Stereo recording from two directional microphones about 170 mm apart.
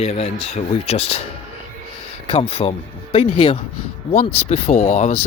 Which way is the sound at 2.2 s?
35° left (ahead or behind).